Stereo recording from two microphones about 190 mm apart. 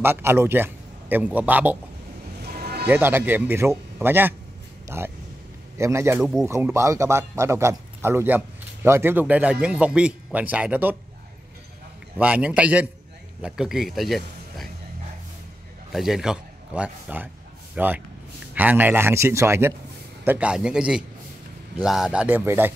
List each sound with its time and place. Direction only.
0.0 s a man's voice: 10° right (ahead or behind)
2.4 s music: 55° right (ahead or behind)
2.9 s speech: 10° right (ahead or behind)
12.2 s a man's voice: 5° right (ahead or behind)
15.9 s a man's voice: centre (ahead or behind)